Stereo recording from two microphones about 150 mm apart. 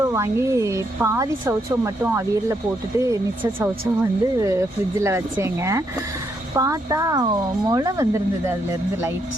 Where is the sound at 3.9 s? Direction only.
20° right (ahead or behind).